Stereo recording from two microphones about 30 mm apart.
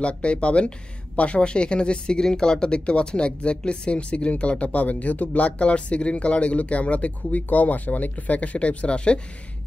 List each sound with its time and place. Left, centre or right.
0.0 s speech: left
4.8 s speech: left
7.4 s speech: left
8.5 s speech: left